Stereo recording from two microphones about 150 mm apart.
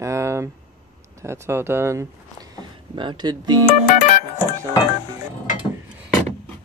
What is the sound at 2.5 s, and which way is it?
Speech, 30° right (ahead or behind).